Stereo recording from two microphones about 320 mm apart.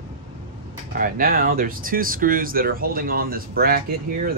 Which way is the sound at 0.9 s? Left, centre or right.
Right.